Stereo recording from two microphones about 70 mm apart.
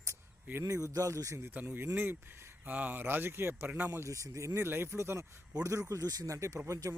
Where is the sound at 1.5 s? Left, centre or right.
Right.